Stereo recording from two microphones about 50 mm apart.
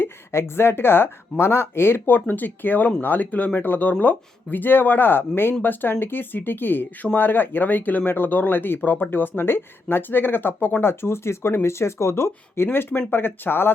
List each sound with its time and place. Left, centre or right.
0.0 s speech: left
12.6 s speech: left